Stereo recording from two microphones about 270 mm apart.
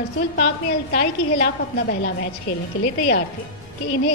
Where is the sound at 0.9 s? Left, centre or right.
Left.